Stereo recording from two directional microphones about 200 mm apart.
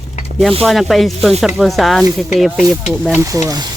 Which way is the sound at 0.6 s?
Centre (ahead or behind).